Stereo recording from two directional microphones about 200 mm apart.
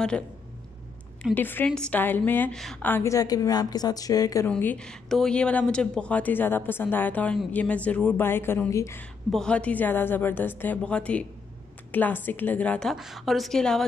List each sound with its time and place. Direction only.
1.2 s a woman's voice: 10° left (ahead or behind)